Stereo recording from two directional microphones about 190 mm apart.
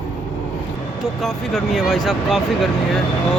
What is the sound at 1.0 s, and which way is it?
Speech, centre (ahead or behind).